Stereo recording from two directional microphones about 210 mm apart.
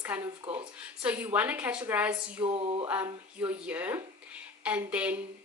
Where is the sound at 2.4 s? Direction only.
25° right (ahead or behind).